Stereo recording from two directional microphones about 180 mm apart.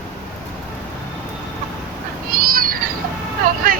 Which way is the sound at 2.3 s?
50° right (ahead or behind).